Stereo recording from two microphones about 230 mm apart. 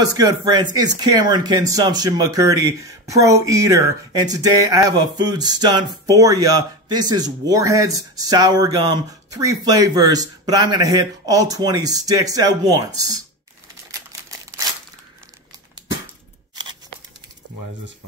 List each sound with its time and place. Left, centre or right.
0.0 s speech: centre